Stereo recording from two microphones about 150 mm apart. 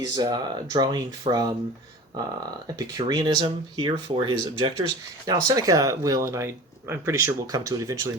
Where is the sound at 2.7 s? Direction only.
25° right (ahead or behind).